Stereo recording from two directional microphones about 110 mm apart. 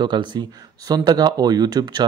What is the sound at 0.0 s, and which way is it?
Speech, 45° right (ahead or behind).